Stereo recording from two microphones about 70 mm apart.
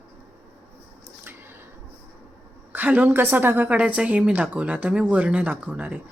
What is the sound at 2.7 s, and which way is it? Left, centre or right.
A woman's voice, right.